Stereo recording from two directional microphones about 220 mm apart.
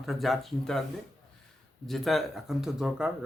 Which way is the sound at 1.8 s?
Centre (ahead or behind).